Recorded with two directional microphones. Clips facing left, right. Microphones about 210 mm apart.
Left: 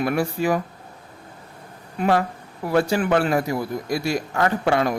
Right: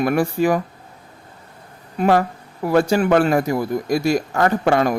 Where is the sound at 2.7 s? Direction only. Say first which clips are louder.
Right 4 dB; 45° right (ahead or behind).